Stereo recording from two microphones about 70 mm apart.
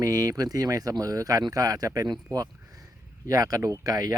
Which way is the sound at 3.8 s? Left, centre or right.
Right.